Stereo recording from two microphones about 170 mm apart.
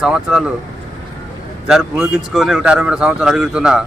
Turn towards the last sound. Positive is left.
turn(degrees=-5)  # may be behind; listen again after turning